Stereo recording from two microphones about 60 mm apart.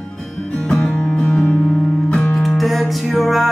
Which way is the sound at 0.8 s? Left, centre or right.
Centre.